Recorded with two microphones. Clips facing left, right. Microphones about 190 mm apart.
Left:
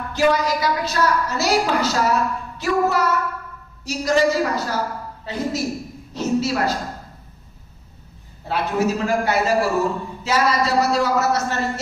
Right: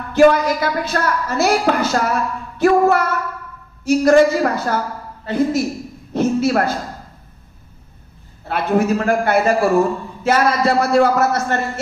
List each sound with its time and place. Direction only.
0.1 s a woman's voice: 55° right (ahead or behind)
8.5 s a woman's voice: 55° right (ahead or behind)